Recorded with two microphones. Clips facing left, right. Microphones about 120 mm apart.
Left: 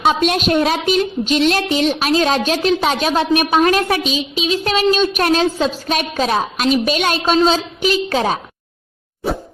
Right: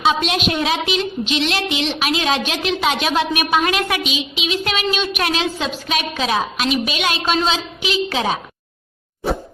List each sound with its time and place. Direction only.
0.0 s a woman's voice: 45° left (ahead or behind)